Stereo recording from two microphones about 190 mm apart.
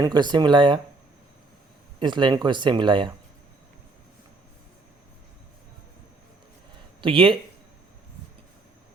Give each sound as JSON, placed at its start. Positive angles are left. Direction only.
{"t": 0.0, "sound": "speech", "side_deg": -20}
{"t": 2.0, "sound": "speech", "side_deg": -25}
{"t": 7.0, "sound": "speech", "side_deg": -30}